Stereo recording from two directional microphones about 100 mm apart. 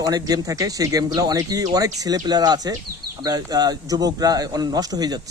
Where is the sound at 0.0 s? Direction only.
40° right (ahead or behind).